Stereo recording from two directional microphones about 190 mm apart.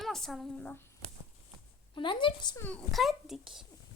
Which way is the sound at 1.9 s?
25° left (ahead or behind).